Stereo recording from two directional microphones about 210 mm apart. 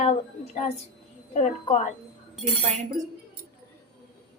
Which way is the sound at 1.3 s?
35° left (ahead or behind).